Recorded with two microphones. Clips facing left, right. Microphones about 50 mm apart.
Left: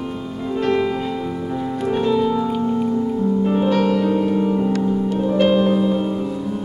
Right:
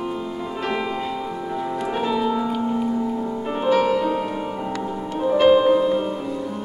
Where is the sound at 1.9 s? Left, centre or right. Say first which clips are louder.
Left 5 dB; centre.